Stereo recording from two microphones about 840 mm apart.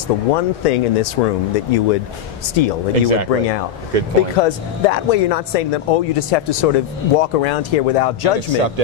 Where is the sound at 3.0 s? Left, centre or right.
Right.